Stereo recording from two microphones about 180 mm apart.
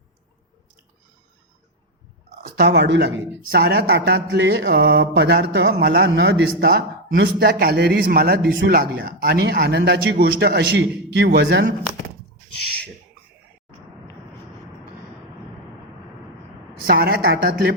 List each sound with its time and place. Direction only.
2.5 s a woman's voice: 65° right (ahead or behind); by 11.7 s 85° right
16.8 s speech: 60° right (ahead or behind)